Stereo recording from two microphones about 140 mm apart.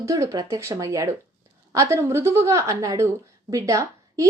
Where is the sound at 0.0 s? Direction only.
20° right (ahead or behind).